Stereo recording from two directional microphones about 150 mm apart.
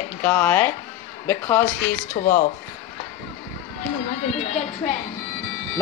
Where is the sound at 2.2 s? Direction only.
65° left (ahead or behind).